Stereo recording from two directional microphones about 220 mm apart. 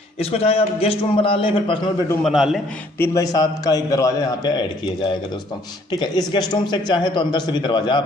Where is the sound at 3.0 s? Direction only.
15° left (ahead or behind).